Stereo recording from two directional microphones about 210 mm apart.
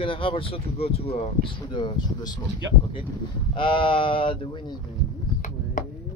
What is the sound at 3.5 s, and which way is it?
Speech, 25° left (ahead or behind).